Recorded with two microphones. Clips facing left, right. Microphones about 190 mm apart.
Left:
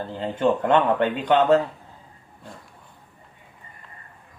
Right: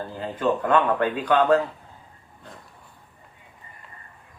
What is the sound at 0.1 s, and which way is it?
Speech, 25° left (ahead or behind).